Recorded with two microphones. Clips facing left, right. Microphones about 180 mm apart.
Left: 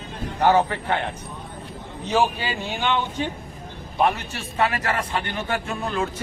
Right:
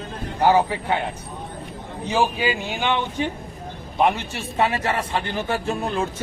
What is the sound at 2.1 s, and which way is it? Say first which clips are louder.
A man's voice: right 1 dB; 10° right (ahead or behind).